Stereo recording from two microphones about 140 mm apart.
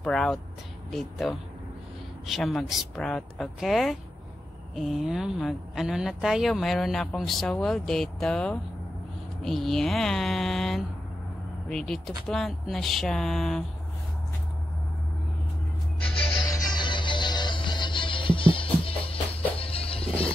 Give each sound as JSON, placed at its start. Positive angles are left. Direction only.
{"t": 0.0, "sound": "a woman's voice", "side_deg": 5}
{"t": 16.4, "sound": "music", "side_deg": 30}